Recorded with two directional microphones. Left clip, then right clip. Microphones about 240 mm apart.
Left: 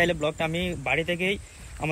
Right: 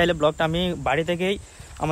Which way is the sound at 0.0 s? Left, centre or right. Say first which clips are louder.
Right 4 dB; centre.